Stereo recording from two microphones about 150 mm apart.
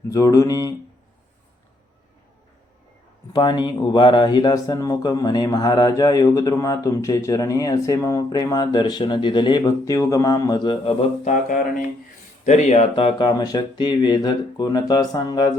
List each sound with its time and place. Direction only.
0.1 s speech: 20° left (ahead or behind)
3.3 s speech: 30° left (ahead or behind)
10.8 s mantra: 60° left (ahead or behind)
12.5 s speech: 50° left (ahead or behind); by 15.5 s 25° left (ahead or behind)